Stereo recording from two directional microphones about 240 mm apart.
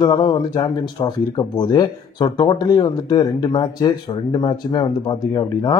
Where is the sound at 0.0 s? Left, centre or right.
Centre.